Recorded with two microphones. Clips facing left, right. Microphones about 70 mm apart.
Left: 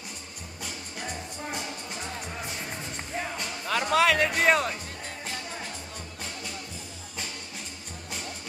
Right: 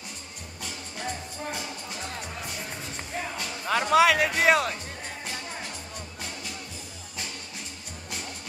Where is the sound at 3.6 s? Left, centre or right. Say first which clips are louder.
Right 3 dB; centre.